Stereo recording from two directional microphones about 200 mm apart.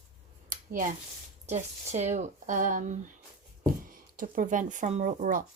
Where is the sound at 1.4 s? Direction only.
35° right (ahead or behind).